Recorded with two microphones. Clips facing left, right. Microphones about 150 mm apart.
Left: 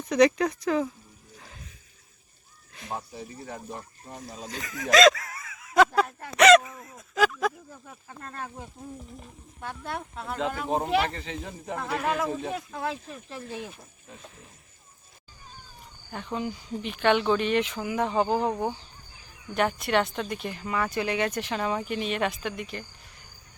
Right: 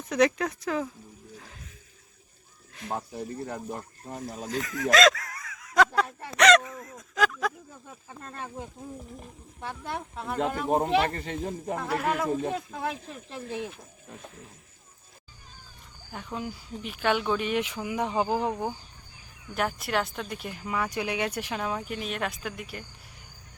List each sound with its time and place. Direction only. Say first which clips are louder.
0.1 s speech: left 3 dB; 5° right (ahead or behind)
2.9 s speech: right 3 dB; 55° right (ahead or behind)
4.4 s speech: right 6 dB; centre (ahead or behind)
11.1 s speech: right 4 dB; 50° right (ahead or behind)
11.7 s speech: left 1 dB; 5° right (ahead or behind)
12.5 s speech: even; 15° right (ahead or behind)
16.1 s speech: left 3 dB; 5° right (ahead or behind)